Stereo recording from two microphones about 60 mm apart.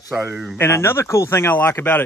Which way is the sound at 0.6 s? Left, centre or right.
Left.